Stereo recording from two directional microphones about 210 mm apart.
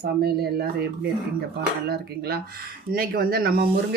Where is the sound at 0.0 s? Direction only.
50° right (ahead or behind).